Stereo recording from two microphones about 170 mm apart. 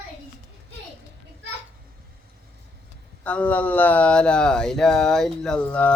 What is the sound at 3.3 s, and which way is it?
Speech, 10° left (ahead or behind).